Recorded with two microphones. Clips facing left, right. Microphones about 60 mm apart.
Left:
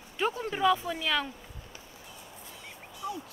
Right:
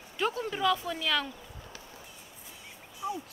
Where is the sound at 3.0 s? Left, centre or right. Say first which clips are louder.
Right 2 dB; right.